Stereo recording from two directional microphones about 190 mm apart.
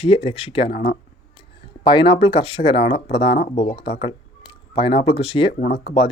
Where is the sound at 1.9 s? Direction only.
25° left (ahead or behind).